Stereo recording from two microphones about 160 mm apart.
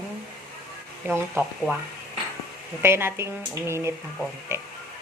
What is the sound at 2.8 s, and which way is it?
A woman's voice, 15° right (ahead or behind).